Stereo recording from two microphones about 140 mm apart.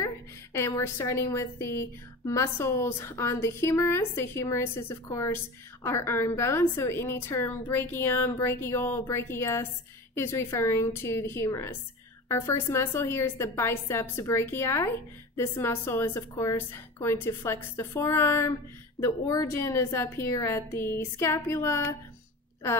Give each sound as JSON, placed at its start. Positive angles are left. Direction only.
{"t": 0.0, "sound": "a woman's voice", "side_deg": 20}